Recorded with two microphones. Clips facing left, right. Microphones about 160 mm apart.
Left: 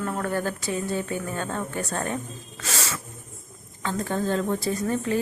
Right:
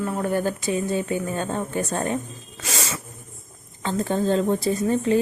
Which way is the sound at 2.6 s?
20° right (ahead or behind).